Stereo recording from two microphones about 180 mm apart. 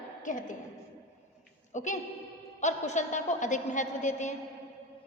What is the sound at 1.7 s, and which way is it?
A woman's voice, 45° left (ahead or behind).